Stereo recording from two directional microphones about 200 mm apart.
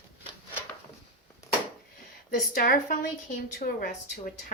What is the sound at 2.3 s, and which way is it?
A woman's voice, 45° left (ahead or behind).